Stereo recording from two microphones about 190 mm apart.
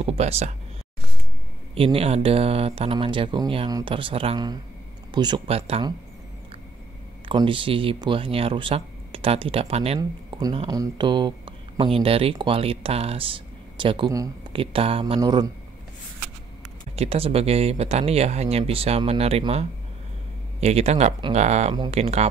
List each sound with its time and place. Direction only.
0.0 s speech: 30° right (ahead or behind)
1.8 s speech: 30° right (ahead or behind)
7.2 s speech: 25° right (ahead or behind)
9.9 s speech: 20° right (ahead or behind)
16.9 s speech: 35° right (ahead or behind)
20.6 s speech: 35° right (ahead or behind)